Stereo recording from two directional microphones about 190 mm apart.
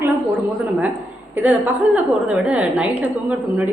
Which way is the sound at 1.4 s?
10° right (ahead or behind).